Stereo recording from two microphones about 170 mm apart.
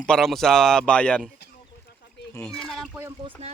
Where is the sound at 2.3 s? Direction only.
5° left (ahead or behind).